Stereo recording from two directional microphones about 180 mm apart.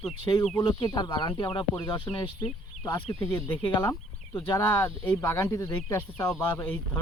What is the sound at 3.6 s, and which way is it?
Speech, 25° left (ahead or behind).